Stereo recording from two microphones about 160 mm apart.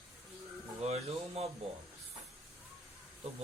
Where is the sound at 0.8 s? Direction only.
40° right (ahead or behind).